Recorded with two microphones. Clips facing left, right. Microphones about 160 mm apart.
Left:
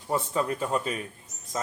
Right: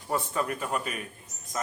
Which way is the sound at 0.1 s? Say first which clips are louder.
Left 2 dB; 20° left (ahead or behind).